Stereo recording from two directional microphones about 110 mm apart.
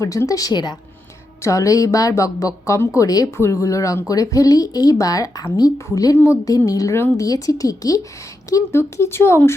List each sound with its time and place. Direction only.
0.0 s speech: 30° left (ahead or behind)
1.4 s speech: 30° left (ahead or behind)